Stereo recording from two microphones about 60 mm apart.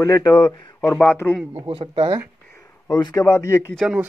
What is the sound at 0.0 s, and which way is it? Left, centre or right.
Speech, left.